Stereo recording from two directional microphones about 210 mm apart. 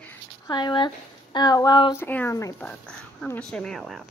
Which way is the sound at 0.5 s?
20° left (ahead or behind).